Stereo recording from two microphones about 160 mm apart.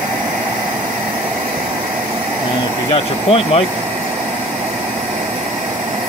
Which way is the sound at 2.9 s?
35° left (ahead or behind).